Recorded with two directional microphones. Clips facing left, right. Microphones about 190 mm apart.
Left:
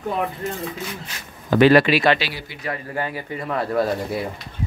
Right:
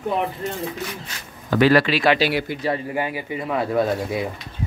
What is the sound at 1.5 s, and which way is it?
Speech, 20° left (ahead or behind).